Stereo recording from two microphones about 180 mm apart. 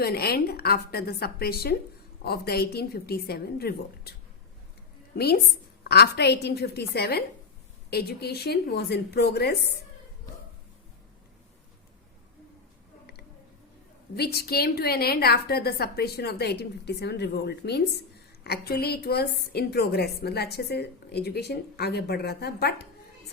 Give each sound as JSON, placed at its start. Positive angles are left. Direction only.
{"t": 0.0, "sound": "a woman's voice", "side_deg": 60}
{"t": 5.1, "sound": "a woman's voice", "side_deg": 60}
{"t": 14.2, "sound": "a woman's voice", "side_deg": 60}